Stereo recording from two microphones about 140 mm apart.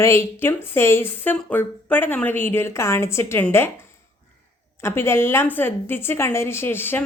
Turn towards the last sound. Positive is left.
turn(degrees=15)  # may be behind; listen again after turning